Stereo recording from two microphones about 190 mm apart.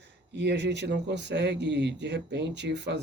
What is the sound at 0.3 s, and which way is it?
Speech, 65° right (ahead or behind).